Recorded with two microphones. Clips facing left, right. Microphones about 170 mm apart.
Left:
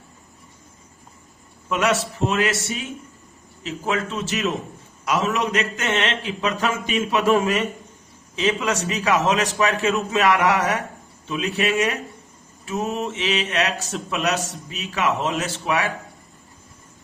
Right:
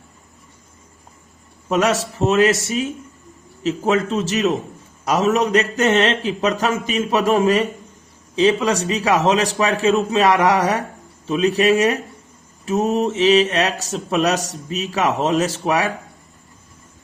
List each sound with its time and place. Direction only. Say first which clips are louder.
1.7 s speech: right 3 dB; 35° right (ahead or behind)